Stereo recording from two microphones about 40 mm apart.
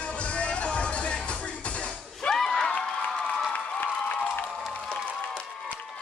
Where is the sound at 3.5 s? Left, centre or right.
Left.